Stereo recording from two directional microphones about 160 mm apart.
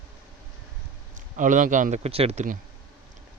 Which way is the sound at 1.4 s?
55° right (ahead or behind).